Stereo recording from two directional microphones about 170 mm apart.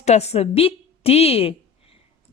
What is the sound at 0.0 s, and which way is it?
A woman's voice, 40° left (ahead or behind).